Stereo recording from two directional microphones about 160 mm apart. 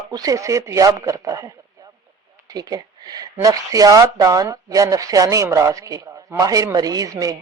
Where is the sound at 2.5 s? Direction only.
25° right (ahead or behind).